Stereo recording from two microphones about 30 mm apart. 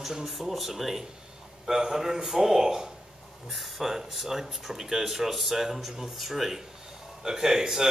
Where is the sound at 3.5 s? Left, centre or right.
Centre.